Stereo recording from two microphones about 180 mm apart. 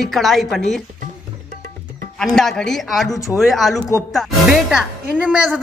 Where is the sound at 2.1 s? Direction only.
Centre (ahead or behind).